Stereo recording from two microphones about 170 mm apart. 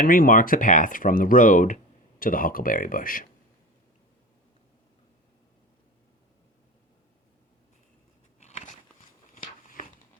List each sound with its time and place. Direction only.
0.0 s speech: 55° left (ahead or behind)
8.4 s biting: 45° left (ahead or behind)
9.3 s a sound: 50° left (ahead or behind)